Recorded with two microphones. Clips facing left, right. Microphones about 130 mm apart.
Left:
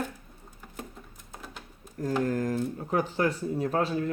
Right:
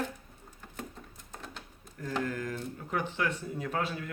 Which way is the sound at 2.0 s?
40° left (ahead or behind).